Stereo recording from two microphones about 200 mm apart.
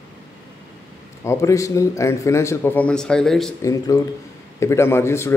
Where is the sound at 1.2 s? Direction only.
15° left (ahead or behind).